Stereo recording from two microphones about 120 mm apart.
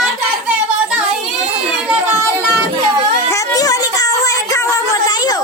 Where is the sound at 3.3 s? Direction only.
30° left (ahead or behind).